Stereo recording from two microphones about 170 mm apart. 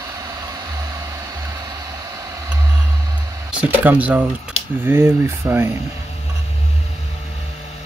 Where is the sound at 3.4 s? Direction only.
10° right (ahead or behind).